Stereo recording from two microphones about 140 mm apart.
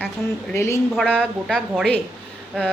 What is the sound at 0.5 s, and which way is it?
Speech, 20° left (ahead or behind).